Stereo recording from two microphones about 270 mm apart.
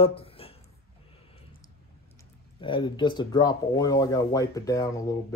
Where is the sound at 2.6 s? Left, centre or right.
Centre.